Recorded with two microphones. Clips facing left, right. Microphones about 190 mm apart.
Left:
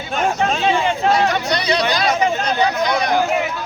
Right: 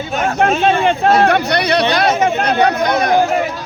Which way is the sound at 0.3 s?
60° right (ahead or behind).